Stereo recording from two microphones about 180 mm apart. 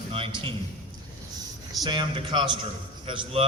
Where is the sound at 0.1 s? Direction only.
30° right (ahead or behind).